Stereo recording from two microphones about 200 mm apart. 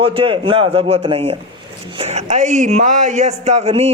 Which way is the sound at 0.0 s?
25° right (ahead or behind).